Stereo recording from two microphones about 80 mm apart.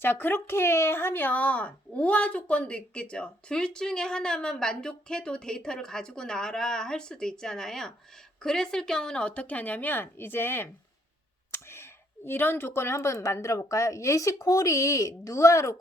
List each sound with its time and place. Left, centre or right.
0.0 s speech: left